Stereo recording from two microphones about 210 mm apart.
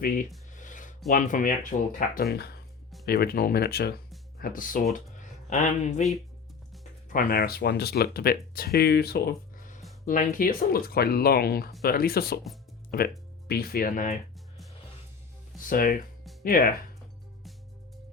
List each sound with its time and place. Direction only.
0.0 s speech: 40° left (ahead or behind)
7.1 s speech: 45° left (ahead or behind)
15.5 s speech: 40° left (ahead or behind)